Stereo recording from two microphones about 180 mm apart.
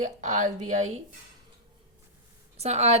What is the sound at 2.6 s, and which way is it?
Speech, 35° right (ahead or behind).